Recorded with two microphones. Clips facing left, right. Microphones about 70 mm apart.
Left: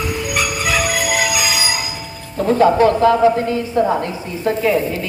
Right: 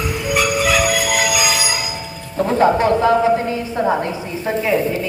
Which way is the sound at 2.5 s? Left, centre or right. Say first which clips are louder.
Left 2 dB; centre.